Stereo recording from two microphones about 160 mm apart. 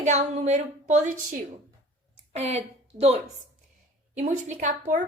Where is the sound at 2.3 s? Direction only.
40° right (ahead or behind).